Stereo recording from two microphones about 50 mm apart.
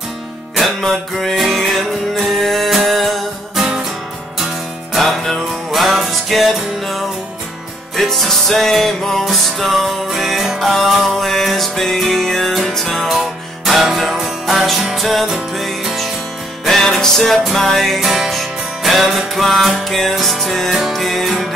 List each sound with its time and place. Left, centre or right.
0.6 s music: centre
4.9 s music: centre